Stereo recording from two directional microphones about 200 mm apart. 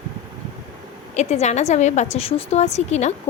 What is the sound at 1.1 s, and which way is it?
A woman's voice, 35° left (ahead or behind).